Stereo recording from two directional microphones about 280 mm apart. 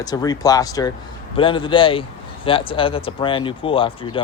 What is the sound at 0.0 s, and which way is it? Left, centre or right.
Speech, centre.